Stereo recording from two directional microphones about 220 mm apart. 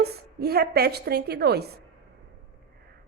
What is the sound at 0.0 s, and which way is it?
Speech, 45° right (ahead or behind).